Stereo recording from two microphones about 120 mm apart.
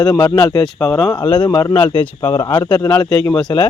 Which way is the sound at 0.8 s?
5° left (ahead or behind).